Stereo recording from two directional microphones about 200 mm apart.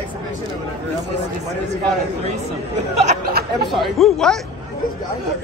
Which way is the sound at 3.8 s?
Centre (ahead or behind).